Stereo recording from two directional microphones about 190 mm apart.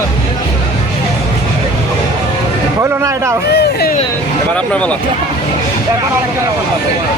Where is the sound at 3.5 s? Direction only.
60° left (ahead or behind).